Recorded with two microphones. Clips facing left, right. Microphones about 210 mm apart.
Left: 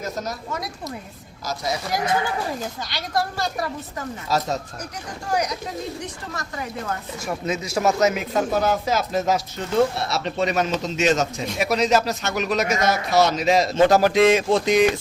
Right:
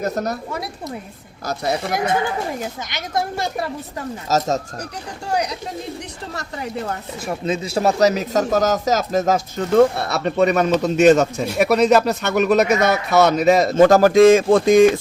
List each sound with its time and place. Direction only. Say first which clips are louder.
0.0 s a man's voice: right 6 dB; 60° right (ahead or behind)
2.6 s speech: right 2 dB; 20° right (ahead or behind)
4.3 s speech: right 4 dB; 45° right (ahead or behind)
6.3 s a man's voice: right 5 dB; 30° right (ahead or behind); by 14.8 s 50° right (ahead or behind)